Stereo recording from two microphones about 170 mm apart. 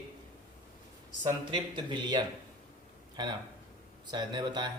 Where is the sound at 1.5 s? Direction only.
25° right (ahead or behind).